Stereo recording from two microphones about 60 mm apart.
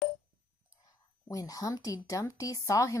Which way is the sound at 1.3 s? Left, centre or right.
Left.